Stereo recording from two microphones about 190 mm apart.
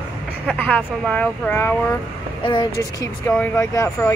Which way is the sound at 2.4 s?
20° left (ahead or behind).